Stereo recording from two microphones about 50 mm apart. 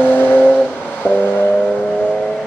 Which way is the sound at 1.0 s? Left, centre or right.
Left.